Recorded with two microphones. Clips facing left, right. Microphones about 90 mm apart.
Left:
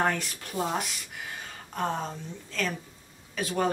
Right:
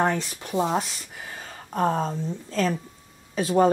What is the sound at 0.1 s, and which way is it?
A woman's voice, 25° right (ahead or behind).